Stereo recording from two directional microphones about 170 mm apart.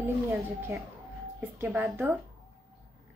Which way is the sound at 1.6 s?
15° right (ahead or behind).